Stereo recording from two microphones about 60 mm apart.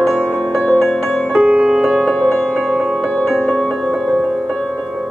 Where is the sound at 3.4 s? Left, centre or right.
Centre.